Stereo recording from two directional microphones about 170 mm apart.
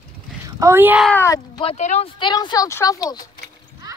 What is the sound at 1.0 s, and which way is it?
Speech, 15° left (ahead or behind).